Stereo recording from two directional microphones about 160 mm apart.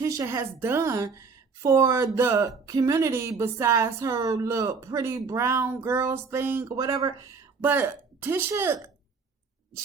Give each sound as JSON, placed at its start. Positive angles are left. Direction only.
{"t": 0.0, "sound": "a woman's voice", "side_deg": -20}